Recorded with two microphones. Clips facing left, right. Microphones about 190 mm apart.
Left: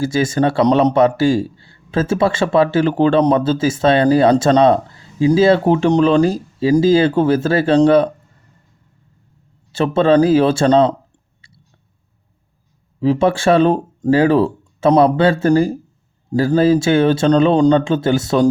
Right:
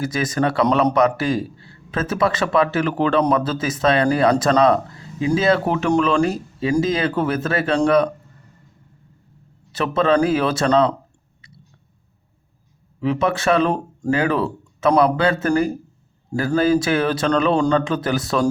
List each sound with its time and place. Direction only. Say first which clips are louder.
0.0 s speech: left 5 dB; 25° left (ahead or behind)
9.7 s speech: left 5 dB; 30° left (ahead or behind)
13.0 s speech: left 5 dB; 30° left (ahead or behind)